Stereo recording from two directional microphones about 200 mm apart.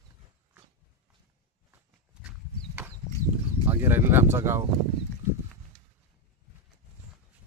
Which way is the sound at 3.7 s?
10° right (ahead or behind).